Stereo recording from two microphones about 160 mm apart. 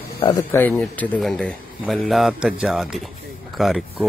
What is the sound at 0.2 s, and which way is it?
Speech, 30° left (ahead or behind).